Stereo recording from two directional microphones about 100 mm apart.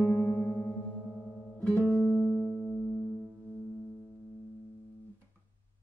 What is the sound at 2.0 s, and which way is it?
Music, centre (ahead or behind).